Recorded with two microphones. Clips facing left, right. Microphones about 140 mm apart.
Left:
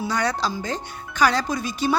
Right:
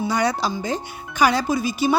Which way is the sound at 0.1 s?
10° right (ahead or behind).